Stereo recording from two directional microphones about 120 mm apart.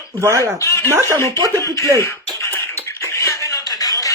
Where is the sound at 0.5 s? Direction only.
20° left (ahead or behind).